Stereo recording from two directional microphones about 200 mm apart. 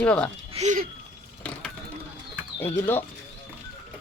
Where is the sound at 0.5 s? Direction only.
35° right (ahead or behind).